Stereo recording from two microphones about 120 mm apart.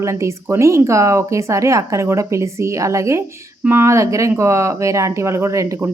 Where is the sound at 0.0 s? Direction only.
25° right (ahead or behind).